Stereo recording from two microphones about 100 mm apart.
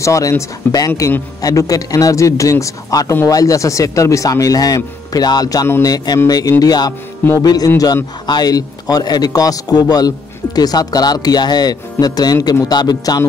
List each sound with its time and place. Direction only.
0.0 s a man's voice: 30° left (ahead or behind)